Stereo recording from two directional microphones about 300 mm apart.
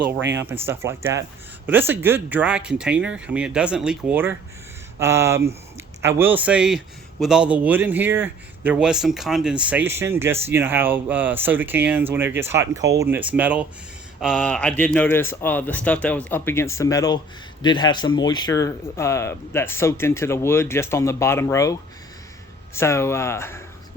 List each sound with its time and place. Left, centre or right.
0.2 s speech: right
0.4 s a man's voice: centre